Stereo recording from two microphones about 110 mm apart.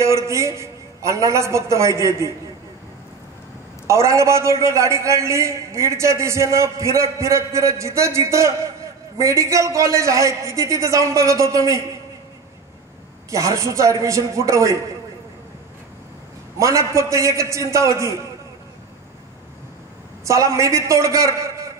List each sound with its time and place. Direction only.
0.0 s a man's voice: 25° right (ahead or behind)
3.8 s a man's voice: 25° right (ahead or behind)
13.3 s a man's voice: 25° right (ahead or behind)
16.5 s a man's voice: 30° right (ahead or behind)
20.2 s a man's voice: 30° right (ahead or behind)